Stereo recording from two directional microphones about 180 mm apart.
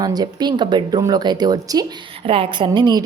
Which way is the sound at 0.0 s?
20° right (ahead or behind).